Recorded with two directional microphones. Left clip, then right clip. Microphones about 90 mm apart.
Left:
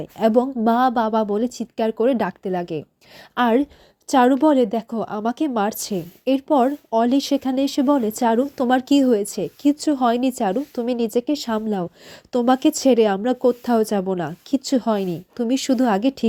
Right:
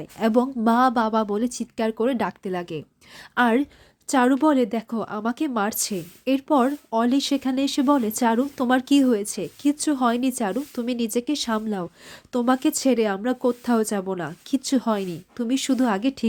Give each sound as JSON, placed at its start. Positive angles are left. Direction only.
{"t": 0.3, "sound": "speech", "side_deg": 15}
{"t": 10.1, "sound": "speech", "side_deg": 30}
{"t": 10.8, "sound": "speech", "side_deg": 20}
{"t": 12.5, "sound": "speech", "side_deg": 40}
{"t": 13.2, "sound": "speech", "side_deg": 30}
{"t": 14.6, "sound": "speech", "side_deg": 25}
{"t": 15.9, "sound": "speech", "side_deg": 40}